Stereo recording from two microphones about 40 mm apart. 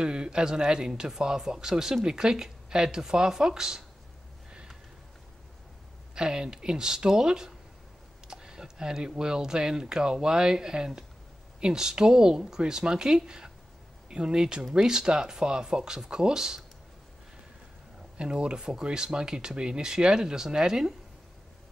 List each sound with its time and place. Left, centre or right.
0.0 s speech: right
6.1 s speech: right
18.1 s speech: right